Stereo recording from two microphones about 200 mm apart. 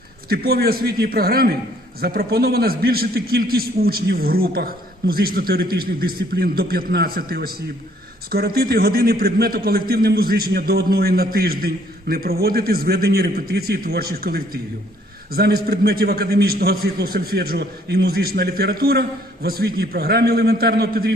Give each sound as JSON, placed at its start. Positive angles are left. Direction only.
{"t": 0.3, "sound": "a man's voice", "side_deg": -50}